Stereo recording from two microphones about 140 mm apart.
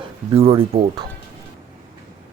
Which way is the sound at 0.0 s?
40° right (ahead or behind).